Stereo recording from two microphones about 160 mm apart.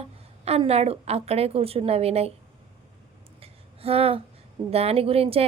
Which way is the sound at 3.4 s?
40° right (ahead or behind).